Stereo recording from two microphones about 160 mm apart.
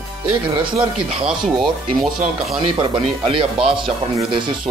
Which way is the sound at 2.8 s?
35° right (ahead or behind).